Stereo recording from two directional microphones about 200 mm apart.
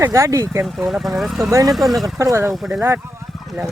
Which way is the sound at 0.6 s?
Centre (ahead or behind).